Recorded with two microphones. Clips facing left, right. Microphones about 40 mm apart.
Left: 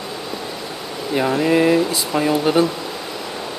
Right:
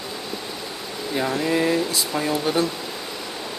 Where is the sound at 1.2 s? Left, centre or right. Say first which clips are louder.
Left 6 dB; left.